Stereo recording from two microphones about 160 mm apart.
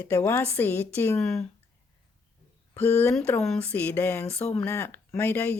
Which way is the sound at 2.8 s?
15° left (ahead or behind).